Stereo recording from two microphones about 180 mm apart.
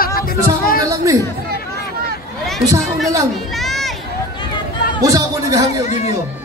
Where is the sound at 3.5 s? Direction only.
Centre (ahead or behind).